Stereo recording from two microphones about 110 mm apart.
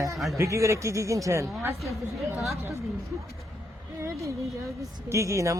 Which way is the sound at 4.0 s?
30° right (ahead or behind).